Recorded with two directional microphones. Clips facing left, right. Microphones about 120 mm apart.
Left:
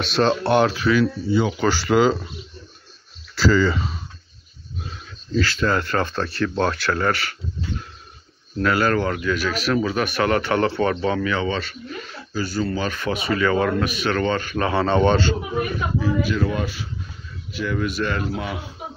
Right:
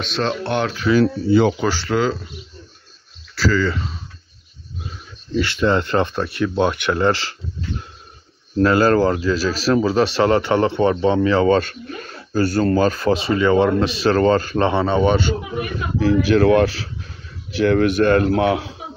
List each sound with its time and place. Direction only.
0.0 s speech: 5° left (ahead or behind)
1.0 s speech: 65° right (ahead or behind)
1.6 s speech: centre (ahead or behind)
3.3 s speech: 20° left (ahead or behind)
5.3 s speech: 20° right (ahead or behind)
8.5 s speech: 35° right (ahead or behind)
11.4 s speech: 45° right (ahead or behind)
14.7 s a man's voice: 10° right (ahead or behind)
16.0 s speech: 85° right